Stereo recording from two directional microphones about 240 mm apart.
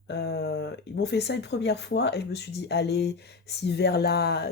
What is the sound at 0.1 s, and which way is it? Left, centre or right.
Speech, left.